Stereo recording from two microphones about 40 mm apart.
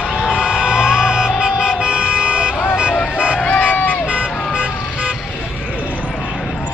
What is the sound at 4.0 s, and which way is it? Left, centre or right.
Vehicle, right.